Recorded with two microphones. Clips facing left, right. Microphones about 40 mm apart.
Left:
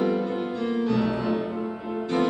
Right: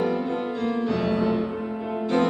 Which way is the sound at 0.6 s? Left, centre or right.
Centre.